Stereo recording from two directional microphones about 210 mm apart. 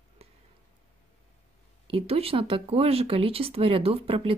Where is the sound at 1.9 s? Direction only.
25° right (ahead or behind).